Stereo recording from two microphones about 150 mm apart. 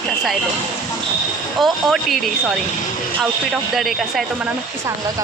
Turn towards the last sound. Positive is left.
turn(degrees=0)  # may be behind; listen again after turning